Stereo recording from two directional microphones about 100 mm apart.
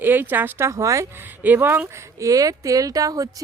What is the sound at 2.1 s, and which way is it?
Speech, 35° right (ahead or behind).